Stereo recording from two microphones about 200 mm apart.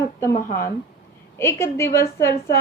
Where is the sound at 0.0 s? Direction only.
15° left (ahead or behind).